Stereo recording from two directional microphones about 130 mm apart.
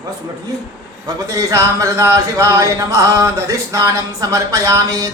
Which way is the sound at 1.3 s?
25° right (ahead or behind).